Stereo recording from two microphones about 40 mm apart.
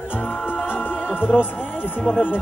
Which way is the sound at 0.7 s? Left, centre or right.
Left.